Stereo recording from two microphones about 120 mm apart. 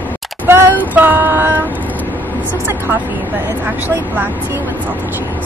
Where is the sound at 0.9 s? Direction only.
15° right (ahead or behind).